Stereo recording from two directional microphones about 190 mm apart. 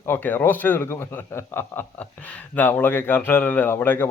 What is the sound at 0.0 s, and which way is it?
A man's voice, 10° left (ahead or behind).